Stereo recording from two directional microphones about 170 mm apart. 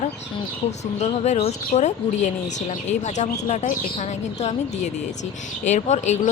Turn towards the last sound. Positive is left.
turn(degrees=45)  # may be behind; listen again after turning